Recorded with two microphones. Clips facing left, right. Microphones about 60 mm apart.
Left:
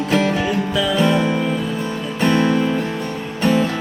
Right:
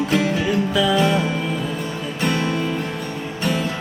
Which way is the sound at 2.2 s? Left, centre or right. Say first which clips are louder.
Left 6 dB; left.